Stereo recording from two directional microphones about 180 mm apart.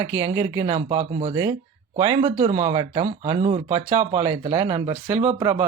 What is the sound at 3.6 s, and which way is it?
Speech, 15° right (ahead or behind).